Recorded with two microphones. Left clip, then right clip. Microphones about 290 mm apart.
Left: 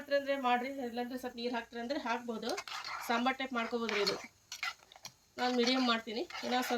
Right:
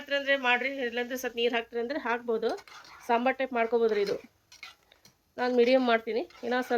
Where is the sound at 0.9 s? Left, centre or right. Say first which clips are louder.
Right 9 dB; centre.